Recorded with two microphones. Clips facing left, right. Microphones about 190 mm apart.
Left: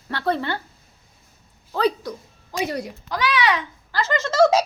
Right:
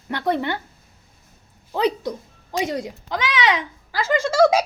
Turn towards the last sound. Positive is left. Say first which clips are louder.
# right 1 dB
turn(degrees=-10)  # may be behind; listen again after turning